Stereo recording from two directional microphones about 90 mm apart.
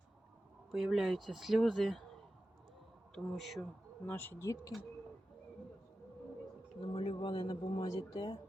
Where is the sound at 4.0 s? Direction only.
20° left (ahead or behind).